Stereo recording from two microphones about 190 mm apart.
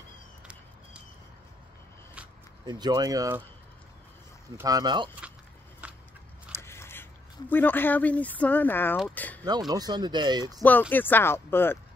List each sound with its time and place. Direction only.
2.6 s speech: 20° right (ahead or behind)
4.6 s speech: 20° right (ahead or behind)
5.8 s a sound: 5° right (ahead or behind)
6.5 s speech: 15° left (ahead or behind)
9.4 s speech: 20° right (ahead or behind)
10.9 s speech: 10° left (ahead or behind)